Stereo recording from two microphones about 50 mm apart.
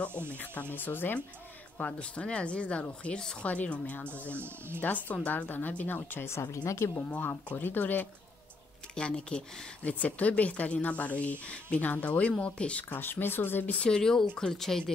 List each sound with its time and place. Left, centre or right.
0.3 s speech: left
1.8 s speech: left
4.4 s speech: right
4.8 s speech: left
6.3 s speech: left
7.0 s speech: left
8.9 s speech: centre
9.8 s speech: left
12.9 s speech: left
13.7 s speech: centre